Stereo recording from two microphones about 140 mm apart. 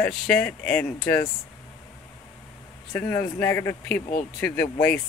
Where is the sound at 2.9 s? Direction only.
25° left (ahead or behind).